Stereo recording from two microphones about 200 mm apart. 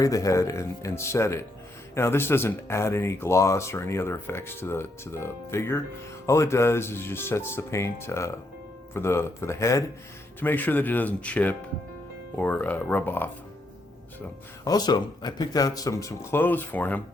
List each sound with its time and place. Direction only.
0.0 s speech: 15° left (ahead or behind)
14.6 s speech: 20° left (ahead or behind)